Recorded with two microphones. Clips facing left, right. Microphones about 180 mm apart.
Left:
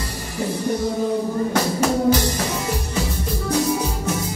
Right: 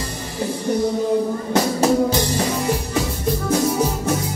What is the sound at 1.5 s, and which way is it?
Music, 25° right (ahead or behind).